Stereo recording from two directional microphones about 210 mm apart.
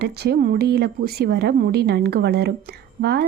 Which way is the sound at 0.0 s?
50° right (ahead or behind).